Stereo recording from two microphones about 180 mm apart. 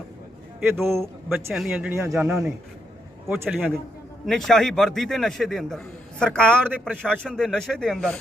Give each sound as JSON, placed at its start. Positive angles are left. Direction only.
{"t": 0.7, "sound": "a man's voice", "side_deg": -15}
{"t": 4.3, "sound": "a man's voice", "side_deg": 0}